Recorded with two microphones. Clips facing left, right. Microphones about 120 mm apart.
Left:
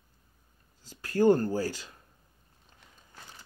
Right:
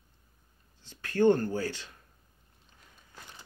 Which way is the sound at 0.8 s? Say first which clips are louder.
Even; 35° left (ahead or behind).